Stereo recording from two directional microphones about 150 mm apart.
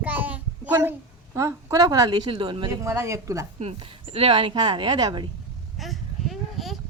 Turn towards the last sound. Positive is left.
turn(degrees=0)  # may be behind; listen again after turning